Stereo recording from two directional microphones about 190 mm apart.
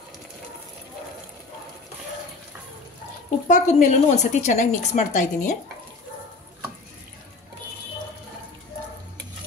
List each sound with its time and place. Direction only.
3.4 s a woman's voice: 40° left (ahead or behind)